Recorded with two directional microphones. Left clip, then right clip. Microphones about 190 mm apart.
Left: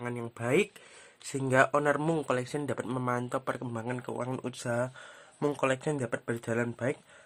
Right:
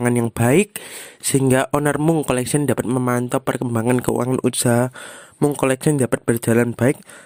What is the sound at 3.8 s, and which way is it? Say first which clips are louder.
Speech: right 17 dB; 50° right (ahead or behind).